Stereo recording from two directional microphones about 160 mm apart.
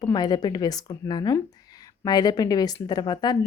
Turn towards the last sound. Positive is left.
turn(degrees=25)  # may be behind; listen again after turning